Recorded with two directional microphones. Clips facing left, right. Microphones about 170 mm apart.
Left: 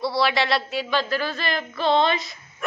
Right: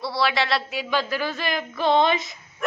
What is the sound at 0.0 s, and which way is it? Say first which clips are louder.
Speech: left 2 dB; centre (ahead or behind).